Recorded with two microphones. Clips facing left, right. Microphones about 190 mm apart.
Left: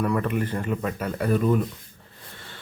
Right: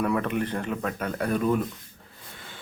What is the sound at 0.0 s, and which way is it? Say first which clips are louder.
Speech: left 1 dB; centre (ahead or behind).